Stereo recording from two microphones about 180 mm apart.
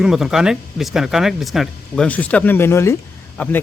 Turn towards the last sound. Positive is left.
turn(degrees=10)  # may be behind; listen again after turning